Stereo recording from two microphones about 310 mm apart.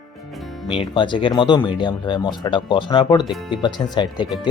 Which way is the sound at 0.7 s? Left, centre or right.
Centre.